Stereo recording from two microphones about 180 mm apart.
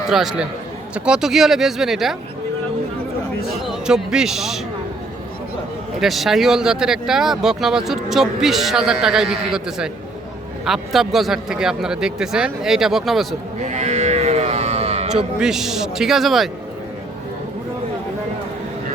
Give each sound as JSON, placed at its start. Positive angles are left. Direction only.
{"t": 0.1, "sound": "speech", "side_deg": 0}
{"t": 3.7, "sound": "speech", "side_deg": -5}
{"t": 6.0, "sound": "speech", "side_deg": 0}
{"t": 13.6, "sound": "sheep", "side_deg": -40}
{"t": 15.4, "sound": "speech", "side_deg": -5}